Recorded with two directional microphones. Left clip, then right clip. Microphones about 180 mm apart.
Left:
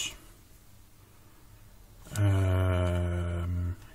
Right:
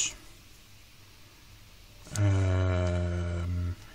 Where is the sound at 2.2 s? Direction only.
Centre (ahead or behind).